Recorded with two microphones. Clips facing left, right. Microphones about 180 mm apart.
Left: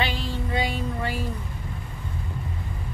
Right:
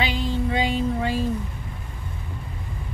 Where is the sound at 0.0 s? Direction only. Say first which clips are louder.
Right 4 dB; 15° right (ahead or behind).